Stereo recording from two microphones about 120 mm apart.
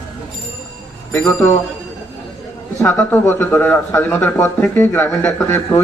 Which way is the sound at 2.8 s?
15° left (ahead or behind).